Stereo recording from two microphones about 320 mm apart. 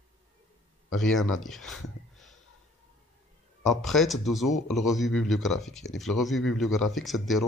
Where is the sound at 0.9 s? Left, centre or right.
Centre.